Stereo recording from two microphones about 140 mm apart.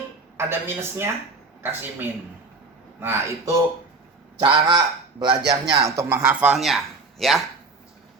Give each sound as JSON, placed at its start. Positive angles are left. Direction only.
{"t": 0.3, "sound": "a woman's voice", "side_deg": -15}
{"t": 4.4, "sound": "a man's voice", "side_deg": -30}